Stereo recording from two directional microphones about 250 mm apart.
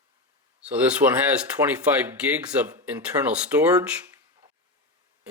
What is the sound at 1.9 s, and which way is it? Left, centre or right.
Speech, centre.